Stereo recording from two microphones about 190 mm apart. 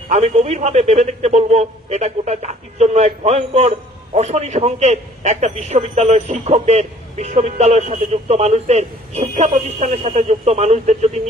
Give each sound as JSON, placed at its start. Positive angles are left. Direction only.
{"t": 0.1, "sound": "a man's voice", "side_deg": -35}